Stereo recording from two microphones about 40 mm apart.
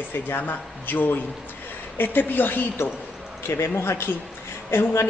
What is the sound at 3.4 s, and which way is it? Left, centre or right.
Speech, left.